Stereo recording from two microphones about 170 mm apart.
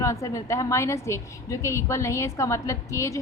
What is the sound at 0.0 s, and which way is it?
A woman's voice, 20° left (ahead or behind).